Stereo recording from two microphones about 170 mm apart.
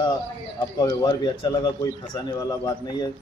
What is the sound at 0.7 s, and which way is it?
Speech, 25° left (ahead or behind).